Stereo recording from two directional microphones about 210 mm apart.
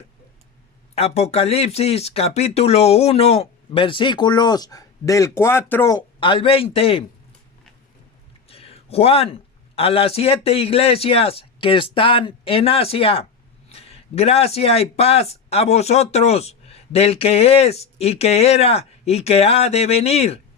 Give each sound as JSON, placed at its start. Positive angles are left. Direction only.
{"t": 0.9, "sound": "a man's voice", "side_deg": 30}
{"t": 8.4, "sound": "a man's voice", "side_deg": 30}